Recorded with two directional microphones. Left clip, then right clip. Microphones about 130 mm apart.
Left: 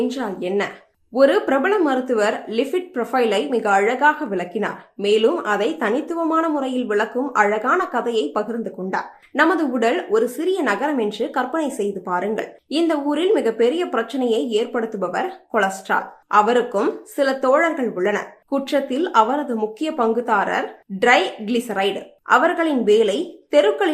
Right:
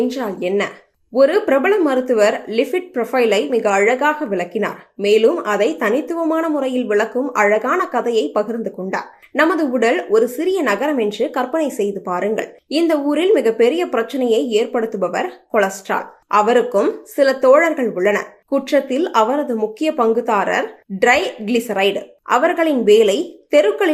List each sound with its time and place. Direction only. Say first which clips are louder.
0.1 s speech: right 3 dB; 20° right (ahead or behind)